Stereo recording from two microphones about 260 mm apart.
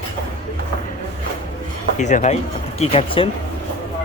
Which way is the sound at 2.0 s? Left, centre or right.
Left.